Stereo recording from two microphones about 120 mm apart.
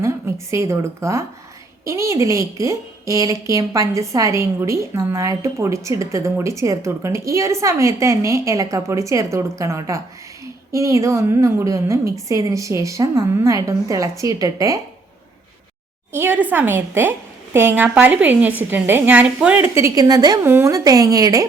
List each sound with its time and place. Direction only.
0.0 s a woman's voice: 25° right (ahead or behind)
16.1 s a woman's voice: 15° right (ahead or behind)
19.6 s a woman's voice: 25° right (ahead or behind)
20.4 s a woman's voice: 20° right (ahead or behind)